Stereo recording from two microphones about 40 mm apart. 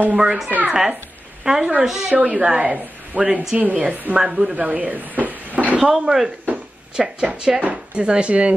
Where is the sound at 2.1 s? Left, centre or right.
Right.